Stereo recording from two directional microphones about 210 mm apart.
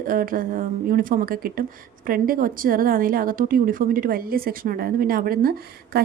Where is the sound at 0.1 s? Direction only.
40° right (ahead or behind).